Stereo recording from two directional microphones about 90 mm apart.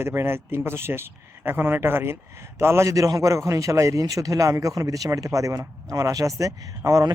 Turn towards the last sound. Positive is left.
turn(degrees=-40)  # may be behind; listen again after turning